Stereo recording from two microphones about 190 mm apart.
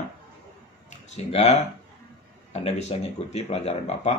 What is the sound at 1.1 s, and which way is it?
Speech, 35° left (ahead or behind).